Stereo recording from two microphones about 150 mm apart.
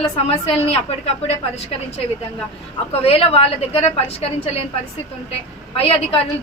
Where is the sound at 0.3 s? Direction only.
40° left (ahead or behind).